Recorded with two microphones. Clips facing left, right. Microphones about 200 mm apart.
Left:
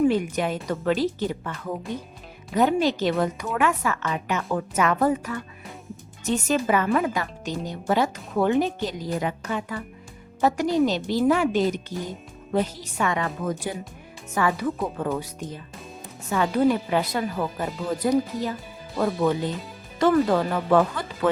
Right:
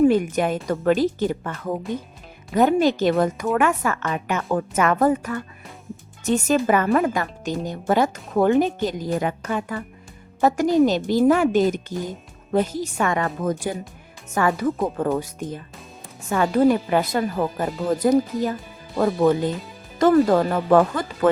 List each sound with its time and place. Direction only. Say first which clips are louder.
0.0 s speech: right 4 dB; 50° right (ahead or behind)